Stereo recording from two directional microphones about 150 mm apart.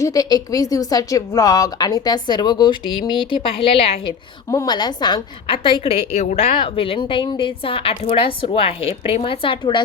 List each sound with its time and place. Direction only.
0.0 s a woman's voice: 25° left (ahead or behind); by 4.1 s 40° left (ahead or behind)
4.4 s a woman's voice: 25° left (ahead or behind)
5.8 s a woman's voice: 45° left (ahead or behind)